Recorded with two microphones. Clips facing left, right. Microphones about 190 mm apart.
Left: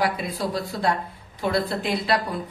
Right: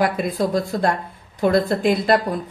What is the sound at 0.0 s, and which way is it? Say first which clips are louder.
Speech: right 5 dB; 50° right (ahead or behind).